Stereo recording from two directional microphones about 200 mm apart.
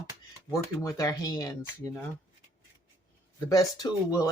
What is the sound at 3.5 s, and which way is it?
Speech, 20° left (ahead or behind).